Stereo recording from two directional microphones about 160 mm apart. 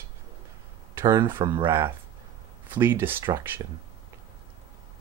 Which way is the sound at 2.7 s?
15° right (ahead or behind).